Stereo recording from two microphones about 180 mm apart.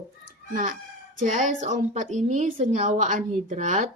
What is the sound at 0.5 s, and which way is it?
A woman's voice, 50° right (ahead or behind).